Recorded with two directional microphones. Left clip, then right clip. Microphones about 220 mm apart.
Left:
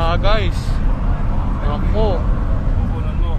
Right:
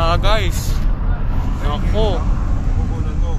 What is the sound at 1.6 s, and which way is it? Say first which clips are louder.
Vehicle: even; centre (ahead or behind).